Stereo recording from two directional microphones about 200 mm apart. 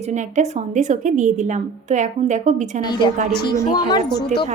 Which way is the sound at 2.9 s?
20° left (ahead or behind).